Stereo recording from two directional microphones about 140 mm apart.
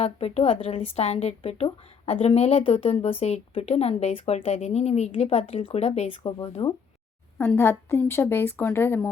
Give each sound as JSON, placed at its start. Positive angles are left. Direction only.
{"t": 0.0, "sound": "a woman's voice", "side_deg": 45}
{"t": 7.3, "sound": "a woman's voice", "side_deg": 15}